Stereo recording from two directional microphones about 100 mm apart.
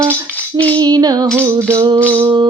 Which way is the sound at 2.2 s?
50° right (ahead or behind).